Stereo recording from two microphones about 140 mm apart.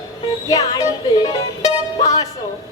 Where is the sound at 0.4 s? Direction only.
25° left (ahead or behind).